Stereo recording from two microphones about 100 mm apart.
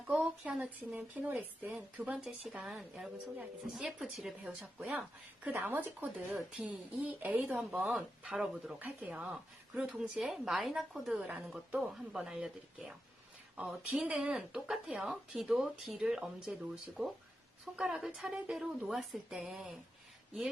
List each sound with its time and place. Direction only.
0.1 s speech: 5° right (ahead or behind)
4.9 s speech: 15° right (ahead or behind)
11.1 s speech: 15° right (ahead or behind)